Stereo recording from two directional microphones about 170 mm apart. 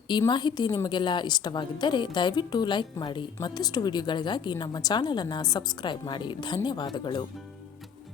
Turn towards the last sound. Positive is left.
turn(degrees=25)  # may be behind; listen again after turning